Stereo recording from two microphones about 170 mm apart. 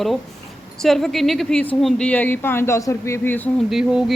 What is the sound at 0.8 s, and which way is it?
Speech, centre (ahead or behind).